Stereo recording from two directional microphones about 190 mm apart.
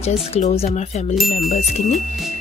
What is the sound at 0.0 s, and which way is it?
Speech, 35° left (ahead or behind).